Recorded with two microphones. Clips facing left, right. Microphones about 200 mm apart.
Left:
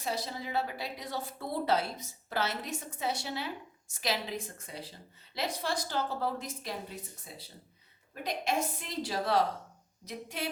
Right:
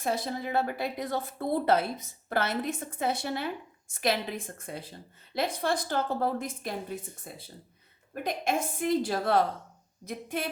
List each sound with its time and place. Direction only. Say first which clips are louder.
0.0 s a woman's voice: right 5 dB; 50° right (ahead or behind)